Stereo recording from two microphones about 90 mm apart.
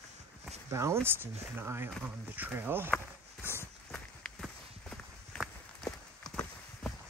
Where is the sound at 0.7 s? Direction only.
35° right (ahead or behind).